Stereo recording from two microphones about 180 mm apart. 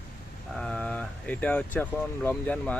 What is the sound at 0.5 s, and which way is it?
Speech, 5° left (ahead or behind).